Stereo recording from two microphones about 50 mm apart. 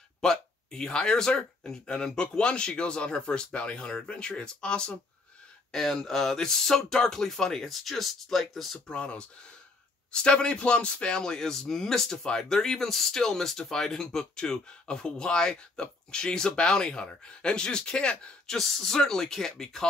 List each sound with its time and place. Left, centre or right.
0.2 s speech: centre
8.7 s speech: left
18.6 s speech: centre